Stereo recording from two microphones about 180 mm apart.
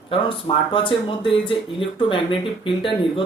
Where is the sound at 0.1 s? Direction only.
30° left (ahead or behind).